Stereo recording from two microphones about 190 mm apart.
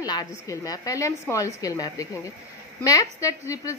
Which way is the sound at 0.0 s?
20° left (ahead or behind).